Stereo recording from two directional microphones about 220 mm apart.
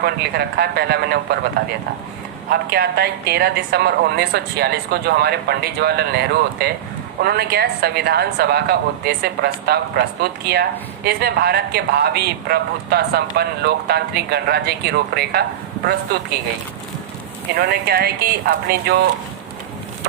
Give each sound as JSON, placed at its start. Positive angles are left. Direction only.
{"t": 0.0, "sound": "speech", "side_deg": -45}
{"t": 2.5, "sound": "speech", "side_deg": -45}
{"t": 17.6, "sound": "speech", "side_deg": -45}